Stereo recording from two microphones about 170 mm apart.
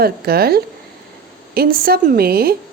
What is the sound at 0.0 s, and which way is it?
A woman's voice, 65° right (ahead or behind).